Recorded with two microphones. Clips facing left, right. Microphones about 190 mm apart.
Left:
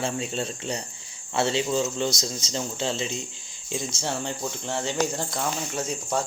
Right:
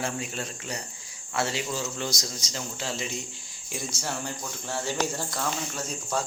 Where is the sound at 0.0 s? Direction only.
25° left (ahead or behind).